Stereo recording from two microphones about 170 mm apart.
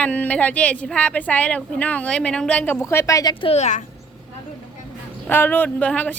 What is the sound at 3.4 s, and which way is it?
Speech, 40° left (ahead or behind).